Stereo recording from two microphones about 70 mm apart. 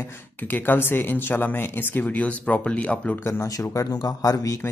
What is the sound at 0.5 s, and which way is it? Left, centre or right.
Speech, left.